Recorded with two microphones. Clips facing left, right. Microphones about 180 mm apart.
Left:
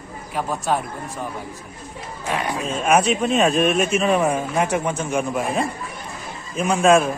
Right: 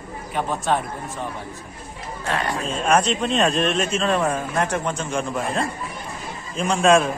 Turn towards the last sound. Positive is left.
turn(degrees=0)  # may be behind; listen again after turning